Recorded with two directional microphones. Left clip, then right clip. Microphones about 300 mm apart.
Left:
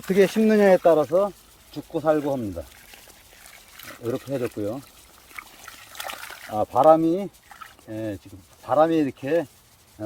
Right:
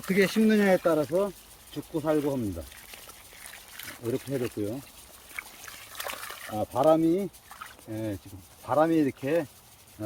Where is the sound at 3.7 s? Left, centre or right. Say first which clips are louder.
Left 3 dB; centre.